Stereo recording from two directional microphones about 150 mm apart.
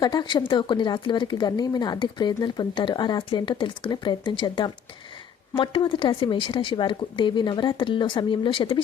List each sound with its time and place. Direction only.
0.0 s speech: 30° left (ahead or behind)